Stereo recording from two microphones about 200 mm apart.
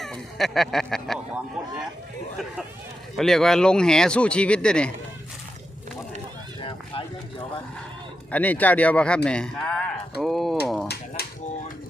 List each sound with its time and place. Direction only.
0.0 s speech: centre (ahead or behind)
3.2 s speech: centre (ahead or behind)
6.6 s run: 25° left (ahead or behind)
8.3 s speech: 10° left (ahead or behind)
11.2 s a sound: 50° left (ahead or behind)